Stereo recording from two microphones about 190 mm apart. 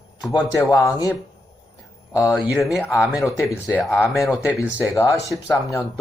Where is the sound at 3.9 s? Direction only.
10° left (ahead or behind).